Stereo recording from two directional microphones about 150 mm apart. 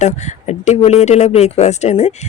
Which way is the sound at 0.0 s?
50° left (ahead or behind).